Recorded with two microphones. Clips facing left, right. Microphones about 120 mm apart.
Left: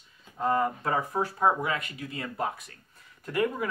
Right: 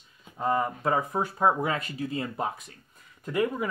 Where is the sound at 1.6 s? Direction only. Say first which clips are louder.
Right 3 dB; 35° right (ahead or behind).